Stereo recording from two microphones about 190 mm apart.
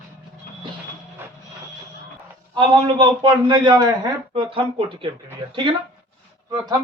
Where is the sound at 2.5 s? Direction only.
25° right (ahead or behind).